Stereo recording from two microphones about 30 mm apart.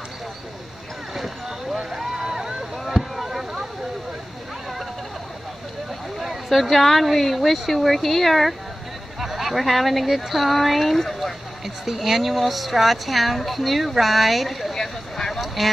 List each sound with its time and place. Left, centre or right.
1.8 s vehicle: centre
2.1 s vehicle: centre
2.9 s boat: centre
6.1 s speech: centre
9.2 s a sound: centre
9.6 s speech: centre
11.6 s speech: centre
14.7 s a sound: centre
15.3 s a sound: centre